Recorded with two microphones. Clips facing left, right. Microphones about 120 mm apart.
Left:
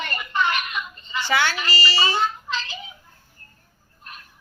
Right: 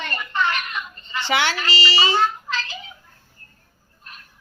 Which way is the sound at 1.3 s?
20° right (ahead or behind).